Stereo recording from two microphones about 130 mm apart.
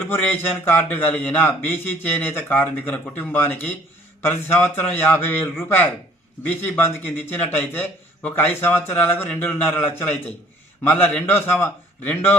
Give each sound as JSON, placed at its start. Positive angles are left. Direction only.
{"t": 0.0, "sound": "a man's voice", "side_deg": 15}